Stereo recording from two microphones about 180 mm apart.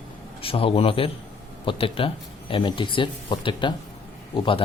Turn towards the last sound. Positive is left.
turn(degrees=30)  # may be behind; listen again after turning